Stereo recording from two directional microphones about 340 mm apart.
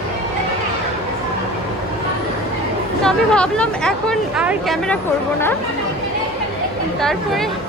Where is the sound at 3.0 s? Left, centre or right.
Centre.